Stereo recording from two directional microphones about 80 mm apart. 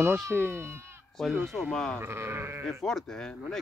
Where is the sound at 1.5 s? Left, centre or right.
Centre.